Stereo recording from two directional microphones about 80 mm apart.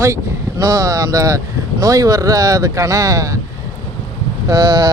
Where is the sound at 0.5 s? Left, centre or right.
Right.